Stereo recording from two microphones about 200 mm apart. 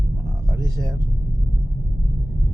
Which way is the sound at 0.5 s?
15° right (ahead or behind).